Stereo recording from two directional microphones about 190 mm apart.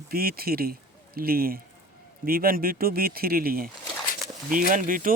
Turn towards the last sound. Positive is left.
turn(degrees=-45)  # may be behind; listen again after turning